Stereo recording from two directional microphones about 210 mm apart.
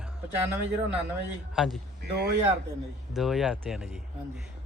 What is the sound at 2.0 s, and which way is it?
Speech, 50° right (ahead or behind).